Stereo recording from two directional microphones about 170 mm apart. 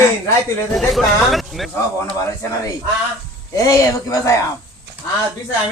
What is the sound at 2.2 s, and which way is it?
Speech, 20° left (ahead or behind).